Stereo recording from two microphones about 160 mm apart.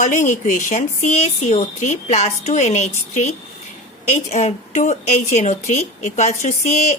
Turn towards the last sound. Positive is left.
turn(degrees=45)  # may be behind; listen again after turning